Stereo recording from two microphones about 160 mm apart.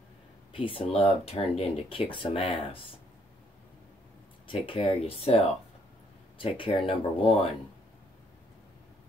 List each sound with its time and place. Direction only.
0.5 s speech: 35° left (ahead or behind)
4.5 s speech: 35° left (ahead or behind)
6.3 s speech: 30° left (ahead or behind)